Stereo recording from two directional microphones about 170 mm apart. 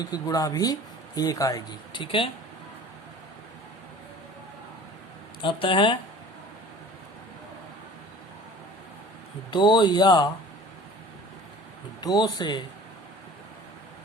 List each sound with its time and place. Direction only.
0.0 s speech: 20° left (ahead or behind)
5.4 s speech: 30° left (ahead or behind)
9.5 s speech: 25° left (ahead or behind)
11.9 s speech: 25° left (ahead or behind)